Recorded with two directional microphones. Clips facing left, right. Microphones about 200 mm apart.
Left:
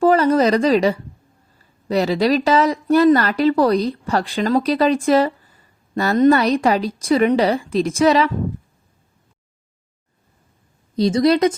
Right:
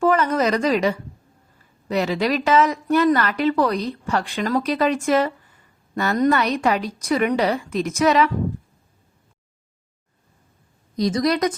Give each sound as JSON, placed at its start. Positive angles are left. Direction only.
{"t": 0.0, "sound": "a woman's voice", "side_deg": 35}
{"t": 10.9, "sound": "a woman's voice", "side_deg": 30}